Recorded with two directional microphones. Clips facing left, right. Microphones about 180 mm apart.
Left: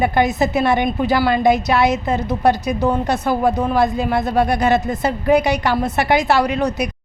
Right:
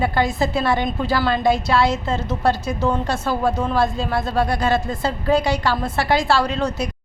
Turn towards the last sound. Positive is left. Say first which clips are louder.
# left 3 dB
turn(degrees=15)  # may be behind; listen again after turning